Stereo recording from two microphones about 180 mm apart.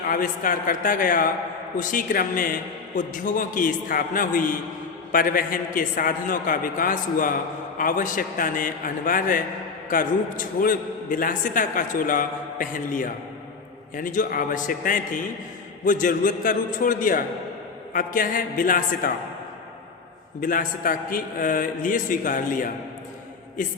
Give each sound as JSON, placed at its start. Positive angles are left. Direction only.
{"t": 0.1, "sound": "a man's voice", "side_deg": 50}
{"t": 20.4, "sound": "a man's voice", "side_deg": 50}